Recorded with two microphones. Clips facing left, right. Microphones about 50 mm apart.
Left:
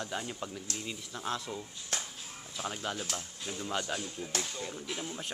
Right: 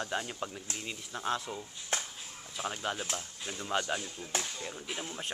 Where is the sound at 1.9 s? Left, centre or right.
Right.